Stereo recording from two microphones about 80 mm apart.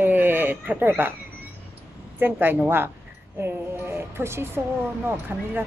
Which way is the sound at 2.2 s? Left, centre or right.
Right.